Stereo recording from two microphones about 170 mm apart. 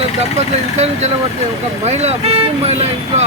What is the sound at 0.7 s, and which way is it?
Speech, 40° right (ahead or behind).